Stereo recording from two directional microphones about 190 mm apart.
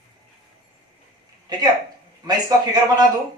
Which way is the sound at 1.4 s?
20° right (ahead or behind).